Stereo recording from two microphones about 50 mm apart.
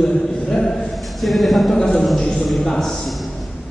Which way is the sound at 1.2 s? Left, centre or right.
Centre.